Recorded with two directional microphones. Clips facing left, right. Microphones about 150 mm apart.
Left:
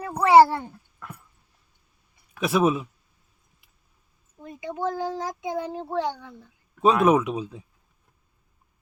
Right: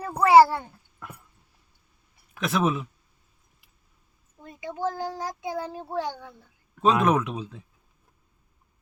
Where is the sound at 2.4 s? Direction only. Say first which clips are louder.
Left 3 dB; 5° left (ahead or behind).